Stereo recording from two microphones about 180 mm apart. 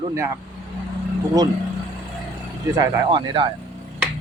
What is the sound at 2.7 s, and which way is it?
Speech, 25° right (ahead or behind).